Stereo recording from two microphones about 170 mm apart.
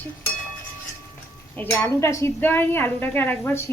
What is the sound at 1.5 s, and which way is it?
Speech, 10° left (ahead or behind).